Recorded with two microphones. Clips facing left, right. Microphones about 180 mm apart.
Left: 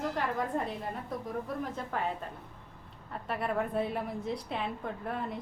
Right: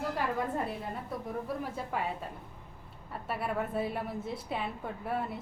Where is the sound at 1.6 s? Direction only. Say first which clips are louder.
Even; 10° right (ahead or behind).